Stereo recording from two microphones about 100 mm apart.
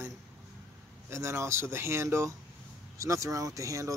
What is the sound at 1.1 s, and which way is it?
Speech, 30° right (ahead or behind).